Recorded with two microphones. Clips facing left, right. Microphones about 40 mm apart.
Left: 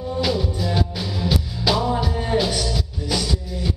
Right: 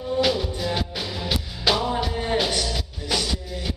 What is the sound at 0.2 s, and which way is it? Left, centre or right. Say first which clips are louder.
Music: even; centre.